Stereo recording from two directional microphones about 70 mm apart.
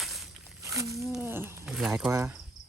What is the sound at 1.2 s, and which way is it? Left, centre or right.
Speech, right.